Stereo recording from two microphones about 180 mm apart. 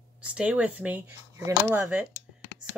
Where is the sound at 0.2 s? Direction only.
5° right (ahead or behind).